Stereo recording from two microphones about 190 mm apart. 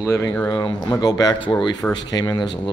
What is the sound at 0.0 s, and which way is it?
Speech, 15° left (ahead or behind).